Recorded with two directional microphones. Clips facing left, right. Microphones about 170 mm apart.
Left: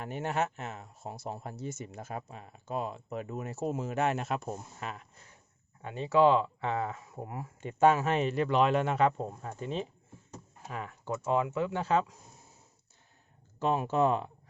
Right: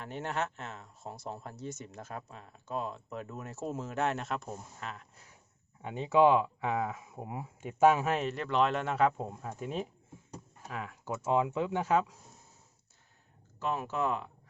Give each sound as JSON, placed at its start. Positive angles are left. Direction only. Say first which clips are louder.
{"t": 0.0, "sound": "speech", "louder": "left 3 dB", "side_deg": 10}
{"t": 5.1, "sound": "speech", "louder": "left 1 dB", "side_deg": -10}
{"t": 11.1, "sound": "speech", "louder": "even", "side_deg": -15}
{"t": 13.6, "sound": "speech", "louder": "left 6 dB", "side_deg": 25}